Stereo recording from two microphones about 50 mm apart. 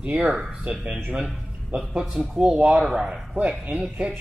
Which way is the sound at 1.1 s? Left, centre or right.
Centre.